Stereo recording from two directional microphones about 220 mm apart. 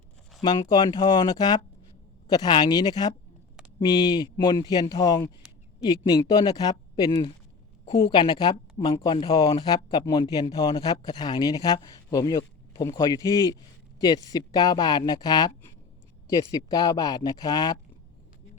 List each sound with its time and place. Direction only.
0.4 s speech: 20° left (ahead or behind)